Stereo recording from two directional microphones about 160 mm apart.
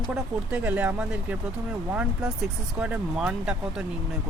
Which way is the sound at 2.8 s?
5° right (ahead or behind).